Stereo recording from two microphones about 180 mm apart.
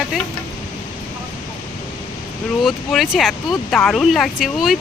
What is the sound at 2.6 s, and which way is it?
Speech, centre (ahead or behind).